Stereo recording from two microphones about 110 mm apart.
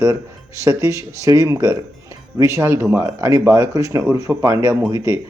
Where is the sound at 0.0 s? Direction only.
30° right (ahead or behind).